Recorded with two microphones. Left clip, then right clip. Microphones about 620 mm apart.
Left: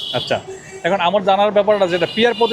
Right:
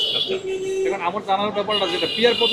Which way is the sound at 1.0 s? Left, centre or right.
Left.